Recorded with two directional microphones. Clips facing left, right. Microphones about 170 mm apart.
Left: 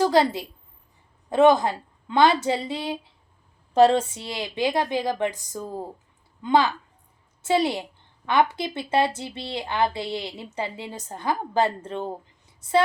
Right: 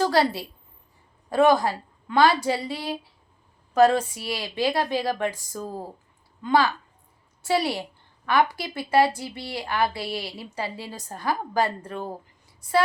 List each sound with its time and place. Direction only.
0.0 s a woman's voice: 20° left (ahead or behind)